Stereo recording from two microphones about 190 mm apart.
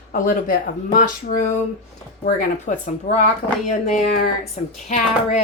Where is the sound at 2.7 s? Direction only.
45° left (ahead or behind).